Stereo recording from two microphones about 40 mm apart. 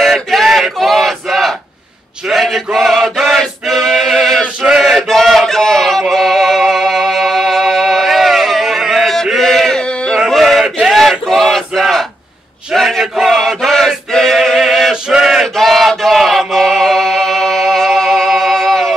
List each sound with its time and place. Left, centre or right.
0.0 s male singing: centre
0.5 s battle cry: centre
2.2 s mantra: centre
3.3 s male singing: centre
4.4 s male singing: centre
5.0 s music: centre
9.4 s a sound: centre
9.8 s a sound: left
10.3 s a sound: centre
10.9 s battle cry: centre
12.7 s a sound: centre
13.0 s male singing: centre
15.4 s chant: centre
16.2 s music: centre